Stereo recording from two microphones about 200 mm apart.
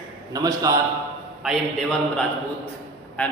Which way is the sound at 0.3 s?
20° right (ahead or behind).